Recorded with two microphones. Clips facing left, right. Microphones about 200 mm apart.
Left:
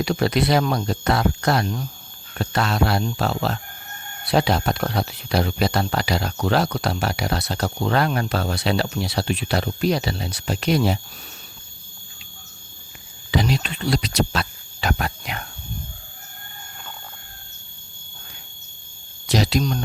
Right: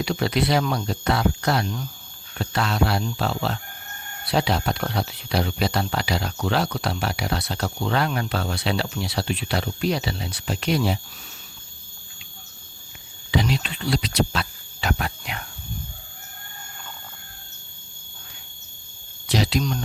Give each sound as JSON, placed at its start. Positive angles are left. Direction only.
{"t": 0.0, "sound": "speech", "side_deg": 45}
{"t": 13.3, "sound": "speech", "side_deg": 45}
{"t": 19.3, "sound": "speech", "side_deg": 40}